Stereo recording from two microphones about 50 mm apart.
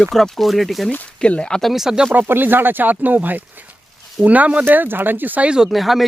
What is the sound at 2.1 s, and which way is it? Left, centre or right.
Speech, right.